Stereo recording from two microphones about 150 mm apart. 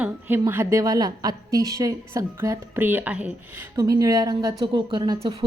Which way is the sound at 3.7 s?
25° right (ahead or behind).